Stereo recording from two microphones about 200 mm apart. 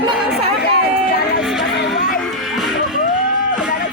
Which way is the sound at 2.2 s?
Centre (ahead or behind).